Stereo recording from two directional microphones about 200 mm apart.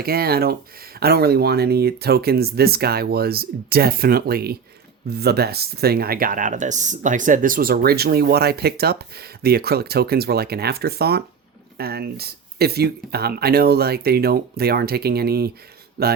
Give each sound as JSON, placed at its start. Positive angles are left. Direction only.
{"t": 0.0, "sound": "speech", "side_deg": -50}